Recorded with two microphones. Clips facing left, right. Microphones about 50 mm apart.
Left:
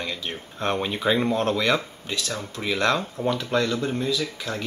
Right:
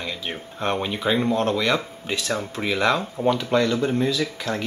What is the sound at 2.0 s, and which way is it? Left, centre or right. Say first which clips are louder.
Speech: right 4 dB; right.